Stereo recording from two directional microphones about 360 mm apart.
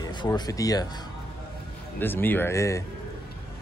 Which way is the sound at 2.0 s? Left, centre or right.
Centre.